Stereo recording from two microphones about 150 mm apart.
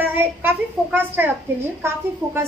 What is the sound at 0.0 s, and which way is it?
Child singing, 15° right (ahead or behind).